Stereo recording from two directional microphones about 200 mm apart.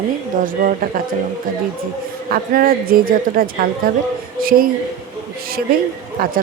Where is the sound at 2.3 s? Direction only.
45° right (ahead or behind).